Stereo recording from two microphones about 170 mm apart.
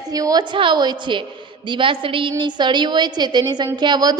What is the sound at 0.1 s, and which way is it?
A woman's voice, 20° right (ahead or behind).